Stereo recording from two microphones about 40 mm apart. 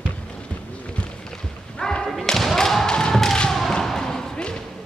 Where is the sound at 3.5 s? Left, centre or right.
Centre.